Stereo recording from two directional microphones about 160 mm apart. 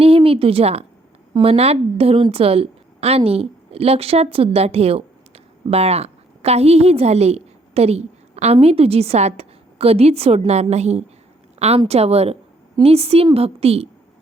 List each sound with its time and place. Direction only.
0.0 s a woman's voice: 35° right (ahead or behind)